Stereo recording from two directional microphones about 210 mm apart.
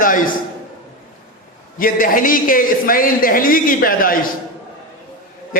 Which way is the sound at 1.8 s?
40° left (ahead or behind).